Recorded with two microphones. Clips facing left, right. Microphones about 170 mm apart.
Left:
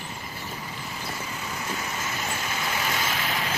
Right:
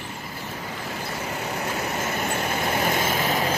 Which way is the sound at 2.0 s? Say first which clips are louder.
Right 6 dB; 55° right (ahead or behind).